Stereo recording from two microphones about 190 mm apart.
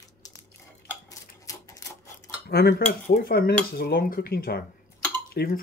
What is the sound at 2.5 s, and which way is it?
Cutlery, 55° left (ahead or behind).